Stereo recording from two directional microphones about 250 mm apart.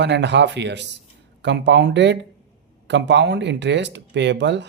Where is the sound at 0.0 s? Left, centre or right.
Right.